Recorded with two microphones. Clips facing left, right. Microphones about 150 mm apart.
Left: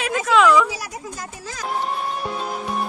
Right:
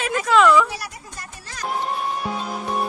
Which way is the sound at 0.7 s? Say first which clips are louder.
Left 2 dB; 90° left.